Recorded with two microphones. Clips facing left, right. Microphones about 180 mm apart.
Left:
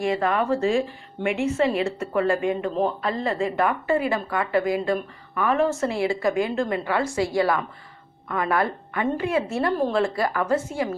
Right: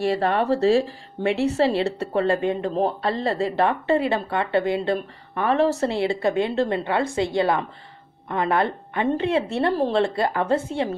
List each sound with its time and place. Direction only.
0.0 s a woman's voice: 35° right (ahead or behind)